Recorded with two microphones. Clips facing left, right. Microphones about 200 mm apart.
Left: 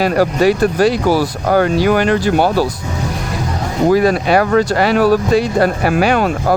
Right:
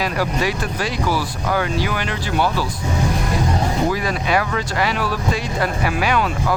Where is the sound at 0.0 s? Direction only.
50° left (ahead or behind).